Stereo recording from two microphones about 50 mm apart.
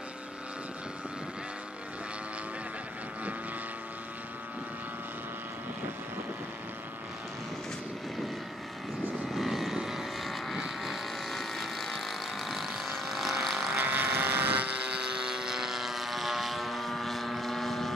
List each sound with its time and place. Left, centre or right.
9.3 s vehicle: centre
13.7 s a sound: right
14.6 s vehicle: centre